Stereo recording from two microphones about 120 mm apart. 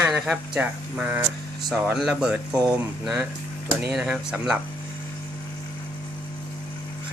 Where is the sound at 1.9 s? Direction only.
5° right (ahead or behind).